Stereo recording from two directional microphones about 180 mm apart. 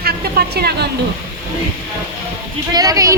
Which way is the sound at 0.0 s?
60° right (ahead or behind).